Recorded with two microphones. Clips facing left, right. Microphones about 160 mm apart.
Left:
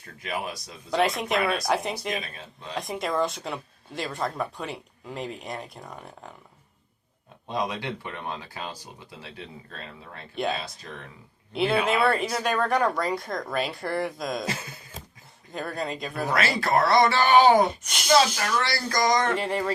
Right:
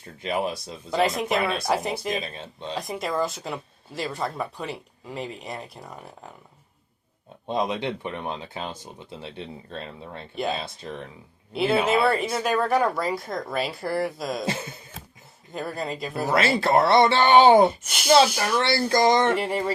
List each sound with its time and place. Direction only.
0.0 s speech: 30° right (ahead or behind)
0.9 s speech: centre (ahead or behind)
2.2 s speech: 25° right (ahead or behind)
2.7 s speech: centre (ahead or behind)
7.4 s speech: 25° right (ahead or behind)
11.5 s speech: centre (ahead or behind)
14.4 s speech: 25° right (ahead or behind)
15.5 s speech: 5° right (ahead or behind)
16.3 s speech: 25° right (ahead or behind)
17.8 s speech: 5° right (ahead or behind)
18.5 s speech: 25° right (ahead or behind)
19.4 s speech: 5° right (ahead or behind)